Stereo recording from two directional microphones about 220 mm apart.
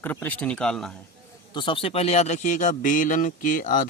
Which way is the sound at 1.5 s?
20° left (ahead or behind).